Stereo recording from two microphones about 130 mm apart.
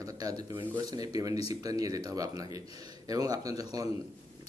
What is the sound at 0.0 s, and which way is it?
A man's voice, 25° right (ahead or behind).